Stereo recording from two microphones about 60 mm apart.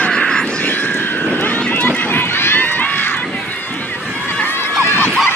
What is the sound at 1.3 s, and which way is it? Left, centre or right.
Run, left.